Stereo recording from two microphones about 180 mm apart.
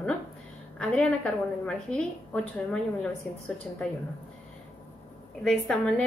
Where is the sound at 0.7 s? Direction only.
5° left (ahead or behind).